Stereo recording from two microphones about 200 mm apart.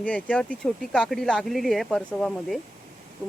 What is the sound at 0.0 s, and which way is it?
Speech, 5° left (ahead or behind).